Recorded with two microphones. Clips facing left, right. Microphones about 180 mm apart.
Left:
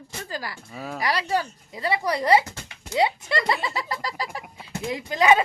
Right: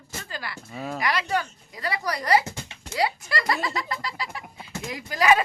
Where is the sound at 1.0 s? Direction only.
35° left (ahead or behind).